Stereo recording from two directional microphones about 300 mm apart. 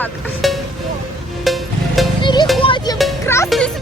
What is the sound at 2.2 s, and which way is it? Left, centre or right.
Music, centre.